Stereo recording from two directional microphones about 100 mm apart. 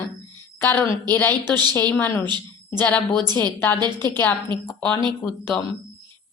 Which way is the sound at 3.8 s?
20° left (ahead or behind).